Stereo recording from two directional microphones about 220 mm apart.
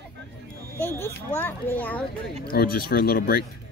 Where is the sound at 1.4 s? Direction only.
10° left (ahead or behind).